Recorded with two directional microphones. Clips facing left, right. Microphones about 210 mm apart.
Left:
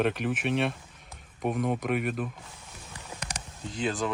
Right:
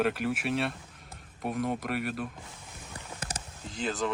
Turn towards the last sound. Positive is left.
turn(degrees=0)  # may be behind; listen again after turning